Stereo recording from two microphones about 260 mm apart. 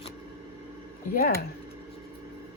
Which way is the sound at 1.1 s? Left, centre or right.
Left.